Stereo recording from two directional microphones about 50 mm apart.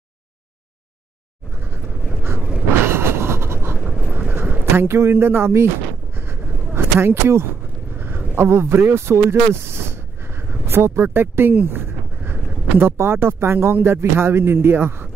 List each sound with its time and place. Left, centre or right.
2.8 s train: right
3.9 s vehicle: right
4.7 s speech: right
6.1 s a sound: right
8.4 s speech: right